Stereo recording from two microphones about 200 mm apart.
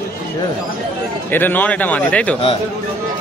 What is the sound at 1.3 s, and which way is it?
A man's voice, 10° left (ahead or behind).